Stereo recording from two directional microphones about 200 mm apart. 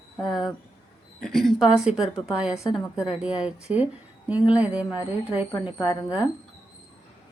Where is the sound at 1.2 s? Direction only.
Centre (ahead or behind).